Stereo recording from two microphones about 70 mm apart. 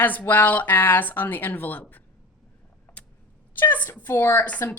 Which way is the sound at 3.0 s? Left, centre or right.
Centre.